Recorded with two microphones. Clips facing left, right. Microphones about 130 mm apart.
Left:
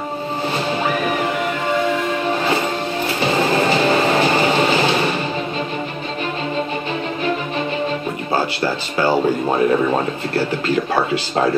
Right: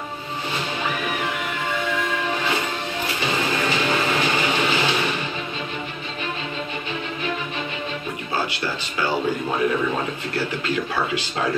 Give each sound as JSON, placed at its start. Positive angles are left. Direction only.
{"t": 3.2, "sound": "music", "side_deg": 40}
{"t": 8.9, "sound": "speech", "side_deg": 40}